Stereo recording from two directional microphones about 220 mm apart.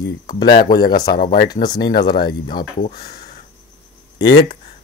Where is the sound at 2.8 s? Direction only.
45° left (ahead or behind).